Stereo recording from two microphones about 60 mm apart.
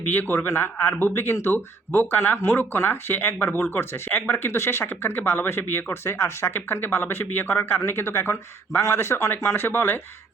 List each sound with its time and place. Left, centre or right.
0.1 s speech: left